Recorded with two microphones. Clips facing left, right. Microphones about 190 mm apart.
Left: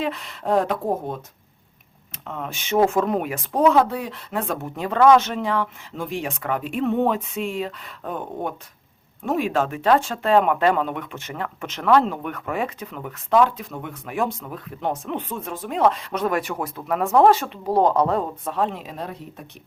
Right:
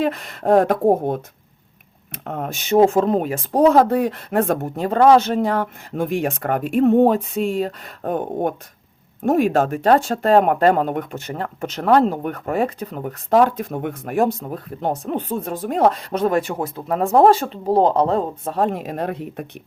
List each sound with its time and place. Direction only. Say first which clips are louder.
0.0 s speech: right 5 dB; 50° right (ahead or behind)
2.7 s speech: right 5 dB; 30° right (ahead or behind)
13.6 s speech: right 8 dB; 50° right (ahead or behind); by 18.6 s 30° right (ahead or behind)
18.6 s speech: right 6 dB; 50° right (ahead or behind)